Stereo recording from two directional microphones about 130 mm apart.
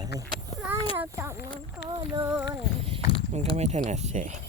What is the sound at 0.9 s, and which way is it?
Speech, 20° right (ahead or behind).